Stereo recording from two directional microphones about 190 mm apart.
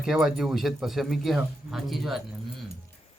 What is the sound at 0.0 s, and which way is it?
Speech, 5° right (ahead or behind).